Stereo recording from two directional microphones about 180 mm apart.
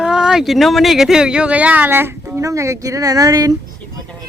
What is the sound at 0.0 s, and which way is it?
Speech, 5° right (ahead or behind).